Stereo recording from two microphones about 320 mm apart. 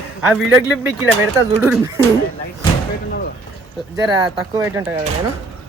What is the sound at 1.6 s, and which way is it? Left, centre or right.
Speech, centre.